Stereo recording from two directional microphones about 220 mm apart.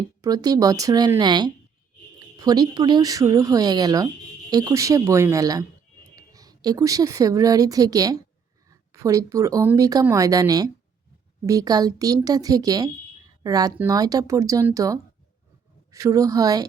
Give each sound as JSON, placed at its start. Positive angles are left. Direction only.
{"t": 0.2, "sound": "a woman's voice", "side_deg": -15}